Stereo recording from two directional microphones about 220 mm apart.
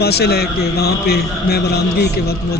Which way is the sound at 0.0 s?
45° left (ahead or behind).